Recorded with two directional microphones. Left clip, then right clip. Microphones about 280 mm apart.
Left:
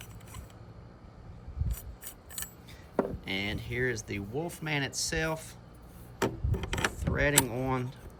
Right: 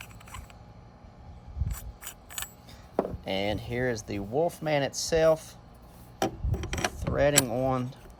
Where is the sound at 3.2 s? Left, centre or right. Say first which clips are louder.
Right 4 dB; centre.